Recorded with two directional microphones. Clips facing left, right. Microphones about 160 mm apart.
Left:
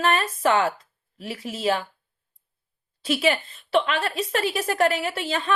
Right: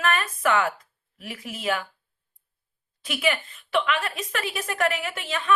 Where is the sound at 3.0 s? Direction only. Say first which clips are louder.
Left 4 dB; 30° left (ahead or behind).